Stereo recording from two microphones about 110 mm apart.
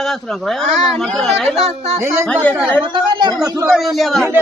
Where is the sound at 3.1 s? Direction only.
45° right (ahead or behind).